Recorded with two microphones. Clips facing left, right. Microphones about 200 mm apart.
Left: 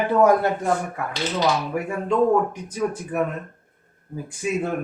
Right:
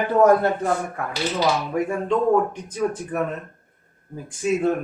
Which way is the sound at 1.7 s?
10° left (ahead or behind).